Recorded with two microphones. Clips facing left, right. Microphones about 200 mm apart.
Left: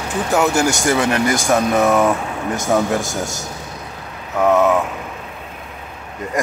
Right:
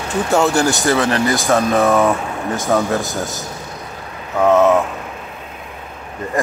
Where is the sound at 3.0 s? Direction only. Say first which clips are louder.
Right 1 dB; 45° left (ahead or behind).